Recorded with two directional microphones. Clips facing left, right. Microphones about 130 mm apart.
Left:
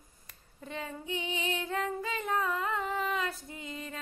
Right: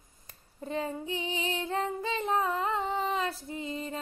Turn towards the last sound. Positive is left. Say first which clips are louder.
# right 6 dB
turn(degrees=-30)  # may be behind; listen again after turning